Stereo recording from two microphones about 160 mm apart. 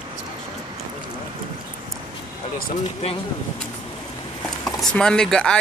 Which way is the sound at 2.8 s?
40° left (ahead or behind).